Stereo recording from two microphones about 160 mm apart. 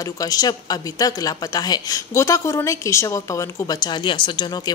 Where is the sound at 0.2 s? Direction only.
25° left (ahead or behind).